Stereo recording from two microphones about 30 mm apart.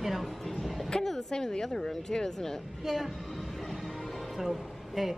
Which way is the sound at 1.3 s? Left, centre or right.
Left.